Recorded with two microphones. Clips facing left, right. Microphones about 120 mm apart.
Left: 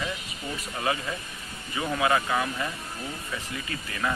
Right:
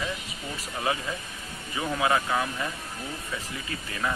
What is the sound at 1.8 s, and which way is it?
Speech, 15° right (ahead or behind).